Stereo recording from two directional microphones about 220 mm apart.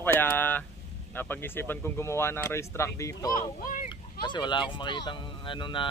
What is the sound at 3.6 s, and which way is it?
Speech, 35° left (ahead or behind).